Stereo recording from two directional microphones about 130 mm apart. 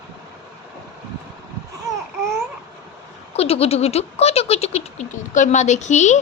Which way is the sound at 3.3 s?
50° left (ahead or behind).